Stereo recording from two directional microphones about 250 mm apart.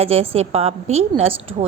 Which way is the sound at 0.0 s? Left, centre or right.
Right.